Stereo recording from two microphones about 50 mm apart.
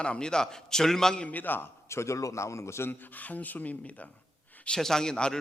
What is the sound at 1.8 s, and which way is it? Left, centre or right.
A man's voice, left.